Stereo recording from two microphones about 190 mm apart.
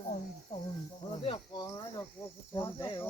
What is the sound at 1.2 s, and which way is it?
Speech, 25° left (ahead or behind).